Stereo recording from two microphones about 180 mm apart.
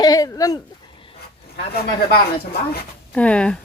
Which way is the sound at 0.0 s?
20° left (ahead or behind).